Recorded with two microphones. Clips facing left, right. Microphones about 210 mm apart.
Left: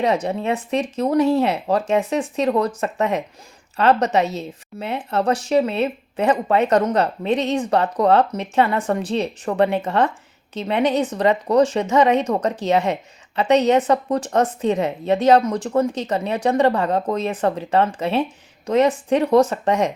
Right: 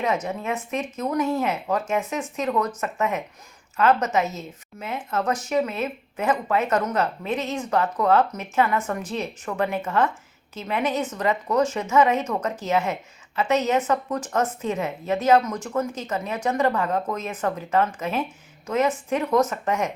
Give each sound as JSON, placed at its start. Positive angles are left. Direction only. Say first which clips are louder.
{"t": 0.0, "sound": "a woman's voice", "louder": "left 5 dB", "side_deg": 35}